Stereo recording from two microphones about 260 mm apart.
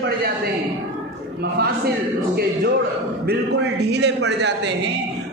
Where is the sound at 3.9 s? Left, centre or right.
Right.